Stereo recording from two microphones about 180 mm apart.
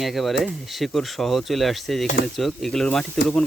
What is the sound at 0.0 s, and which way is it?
Speech, centre (ahead or behind).